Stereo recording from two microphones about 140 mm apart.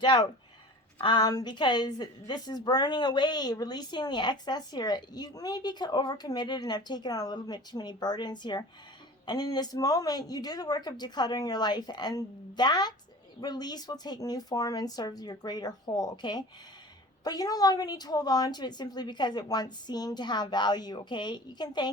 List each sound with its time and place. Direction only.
0.0 s a woman's voice: 30° left (ahead or behind)